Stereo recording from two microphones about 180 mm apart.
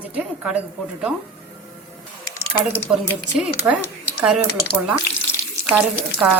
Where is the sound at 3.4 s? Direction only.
5° right (ahead or behind).